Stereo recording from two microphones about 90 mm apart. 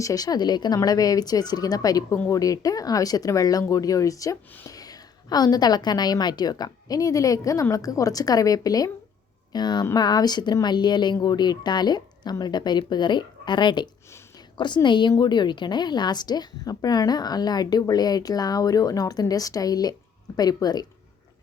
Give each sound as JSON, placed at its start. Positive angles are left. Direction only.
{"t": 0.0, "sound": "a woman's voice", "side_deg": 45}